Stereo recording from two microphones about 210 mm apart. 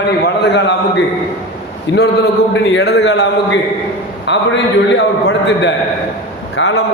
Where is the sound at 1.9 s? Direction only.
55° left (ahead or behind).